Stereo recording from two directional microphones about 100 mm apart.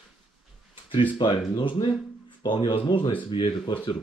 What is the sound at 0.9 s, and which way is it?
Speech, 55° left (ahead or behind).